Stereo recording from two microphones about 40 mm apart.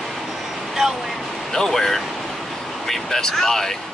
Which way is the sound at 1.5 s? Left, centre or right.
Centre.